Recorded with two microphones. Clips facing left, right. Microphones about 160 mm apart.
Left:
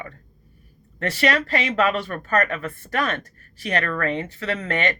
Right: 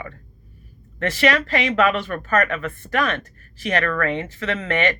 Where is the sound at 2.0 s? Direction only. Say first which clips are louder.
Right 2 dB; 35° left (ahead or behind).